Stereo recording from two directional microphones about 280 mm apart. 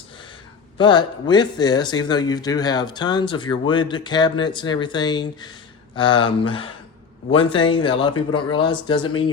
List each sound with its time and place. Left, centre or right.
0.8 s speech: centre